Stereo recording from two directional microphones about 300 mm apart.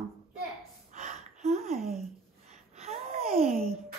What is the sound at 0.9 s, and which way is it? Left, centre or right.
Gasp, right.